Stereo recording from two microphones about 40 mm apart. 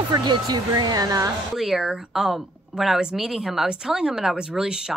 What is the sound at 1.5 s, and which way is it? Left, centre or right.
A woman's voice, centre.